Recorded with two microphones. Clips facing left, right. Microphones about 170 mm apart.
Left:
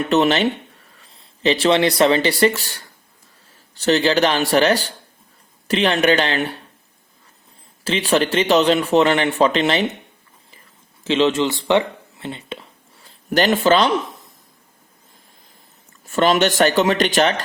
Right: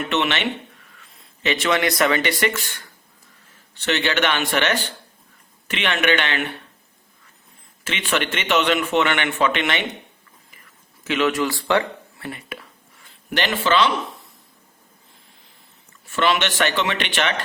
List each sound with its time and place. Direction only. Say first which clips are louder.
0.0 s a man's voice: left 6 dB; 35° left (ahead or behind)
7.9 s a man's voice: left 6 dB; 35° left (ahead or behind)
11.0 s speech: left 4 dB; 30° left (ahead or behind)
16.0 s a man's voice: left 5 dB; 40° left (ahead or behind)